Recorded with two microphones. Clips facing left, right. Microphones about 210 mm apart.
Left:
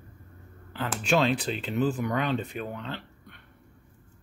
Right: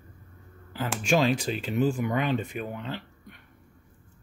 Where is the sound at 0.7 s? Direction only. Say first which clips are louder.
Right 1 dB; 10° right (ahead or behind).